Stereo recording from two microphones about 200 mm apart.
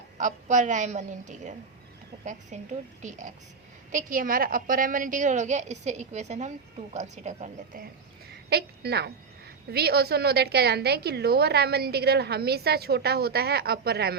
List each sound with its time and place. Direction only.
0.2 s a woman's voice: 40° right (ahead or behind)
8.4 s a woman's voice: 55° right (ahead or behind)